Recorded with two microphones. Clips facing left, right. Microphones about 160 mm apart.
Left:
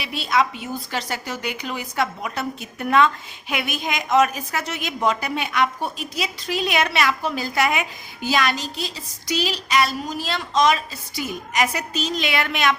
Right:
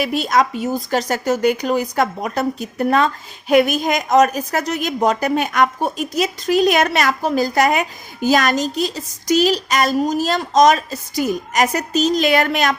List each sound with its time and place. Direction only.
0.0 s a woman's voice: 45° right (ahead or behind)